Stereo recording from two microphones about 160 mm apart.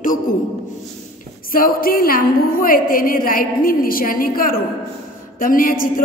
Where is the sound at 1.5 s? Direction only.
65° left (ahead or behind).